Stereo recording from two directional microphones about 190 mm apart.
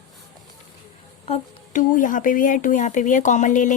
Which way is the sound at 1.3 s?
40° left (ahead or behind).